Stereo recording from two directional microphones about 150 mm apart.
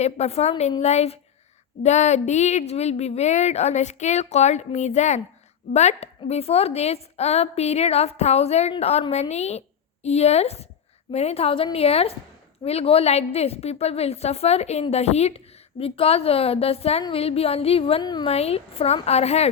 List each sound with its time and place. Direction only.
0.0 s speech: 45° left (ahead or behind)
18.3 s speech: 40° left (ahead or behind)